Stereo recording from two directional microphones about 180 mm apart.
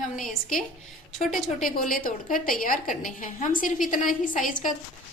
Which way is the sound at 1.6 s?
50° left (ahead or behind).